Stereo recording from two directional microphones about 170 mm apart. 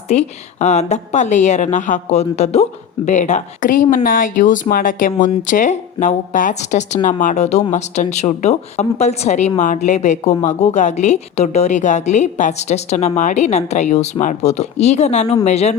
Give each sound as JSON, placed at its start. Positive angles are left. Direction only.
{"t": 0.1, "sound": "a woman's voice", "side_deg": 40}